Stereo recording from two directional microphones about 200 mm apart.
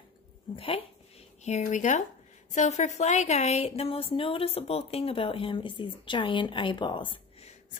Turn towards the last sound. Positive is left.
turn(degrees=25)  # may be behind; listen again after turning